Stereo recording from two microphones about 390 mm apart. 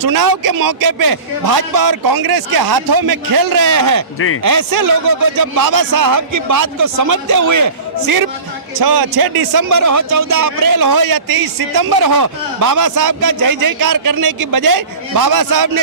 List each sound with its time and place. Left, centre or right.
0.0 s a man's voice: right